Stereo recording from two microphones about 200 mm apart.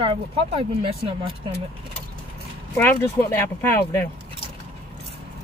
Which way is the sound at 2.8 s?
10° left (ahead or behind).